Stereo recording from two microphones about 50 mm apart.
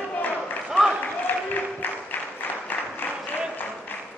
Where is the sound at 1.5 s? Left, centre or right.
Left.